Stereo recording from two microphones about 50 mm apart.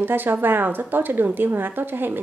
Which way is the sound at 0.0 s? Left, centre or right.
Right.